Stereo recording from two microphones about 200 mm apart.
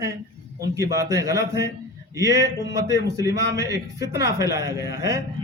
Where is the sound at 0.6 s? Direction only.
15° right (ahead or behind).